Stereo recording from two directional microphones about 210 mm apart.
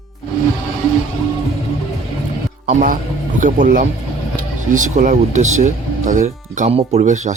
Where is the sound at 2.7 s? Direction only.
40° right (ahead or behind).